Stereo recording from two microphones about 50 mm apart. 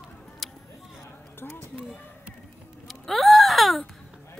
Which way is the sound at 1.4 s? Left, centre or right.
Left.